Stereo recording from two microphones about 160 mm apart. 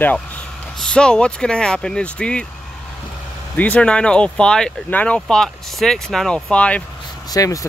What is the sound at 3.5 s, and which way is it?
Speech, 10° left (ahead or behind).